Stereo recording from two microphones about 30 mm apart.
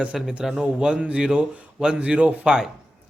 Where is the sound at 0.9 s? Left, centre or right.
Right.